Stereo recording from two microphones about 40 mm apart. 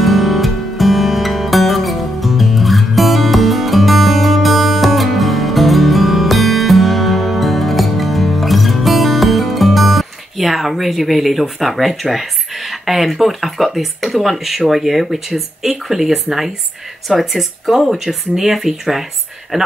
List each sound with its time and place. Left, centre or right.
0.0 s music: centre
13.7 s speech: centre